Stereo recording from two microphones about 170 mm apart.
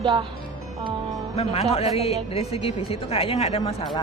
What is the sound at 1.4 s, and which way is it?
Speech, 35° left (ahead or behind).